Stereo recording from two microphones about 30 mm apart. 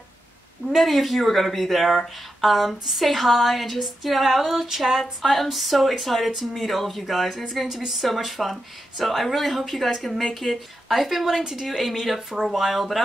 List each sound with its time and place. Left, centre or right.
0.7 s speech: centre
5.2 s a woman's voice: centre
11.0 s speech: centre